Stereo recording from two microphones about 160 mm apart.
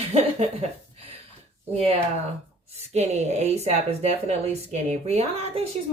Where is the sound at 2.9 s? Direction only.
45° right (ahead or behind).